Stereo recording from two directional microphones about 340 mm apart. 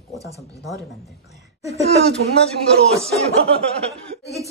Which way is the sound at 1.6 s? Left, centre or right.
Centre.